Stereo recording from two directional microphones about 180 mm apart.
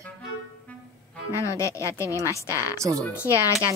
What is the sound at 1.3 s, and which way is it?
Speech, 15° left (ahead or behind).